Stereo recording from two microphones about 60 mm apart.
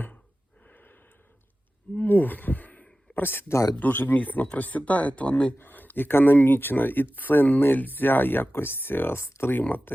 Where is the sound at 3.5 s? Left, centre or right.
Left.